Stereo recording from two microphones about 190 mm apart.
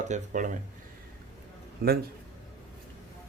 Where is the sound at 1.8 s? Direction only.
55° right (ahead or behind).